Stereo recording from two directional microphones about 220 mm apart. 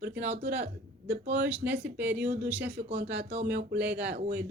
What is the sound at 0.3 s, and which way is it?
Speech, 50° right (ahead or behind).